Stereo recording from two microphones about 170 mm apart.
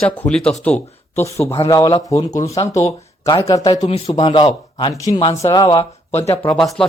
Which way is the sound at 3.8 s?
35° left (ahead or behind).